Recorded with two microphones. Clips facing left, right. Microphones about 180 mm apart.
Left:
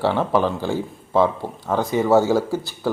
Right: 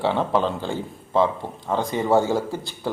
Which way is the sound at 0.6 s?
10° left (ahead or behind).